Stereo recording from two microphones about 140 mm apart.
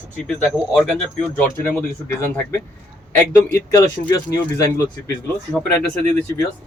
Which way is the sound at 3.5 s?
20° left (ahead or behind).